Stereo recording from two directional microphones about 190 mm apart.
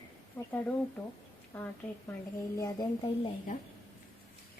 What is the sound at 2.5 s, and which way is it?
Speech, 20° left (ahead or behind).